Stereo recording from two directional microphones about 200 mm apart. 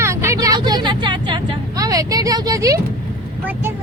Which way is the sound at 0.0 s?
15° right (ahead or behind).